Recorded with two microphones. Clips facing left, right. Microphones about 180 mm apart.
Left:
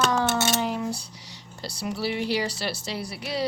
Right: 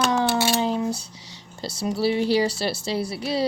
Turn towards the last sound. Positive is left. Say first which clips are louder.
# right 6 dB
turn(degrees=-30)  # may be behind; listen again after turning